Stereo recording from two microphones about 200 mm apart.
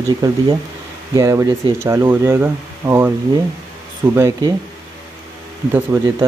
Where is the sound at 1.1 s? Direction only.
15° right (ahead or behind).